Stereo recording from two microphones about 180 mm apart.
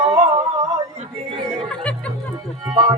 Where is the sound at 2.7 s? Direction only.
25° right (ahead or behind).